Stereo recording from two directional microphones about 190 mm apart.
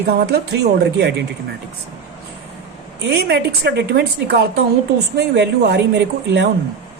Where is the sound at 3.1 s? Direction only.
60° right (ahead or behind).